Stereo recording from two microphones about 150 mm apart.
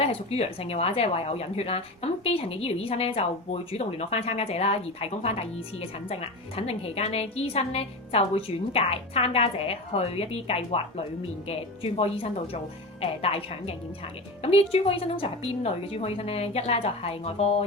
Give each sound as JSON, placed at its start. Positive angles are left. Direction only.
{"t": 0.0, "sound": "speech", "side_deg": 40}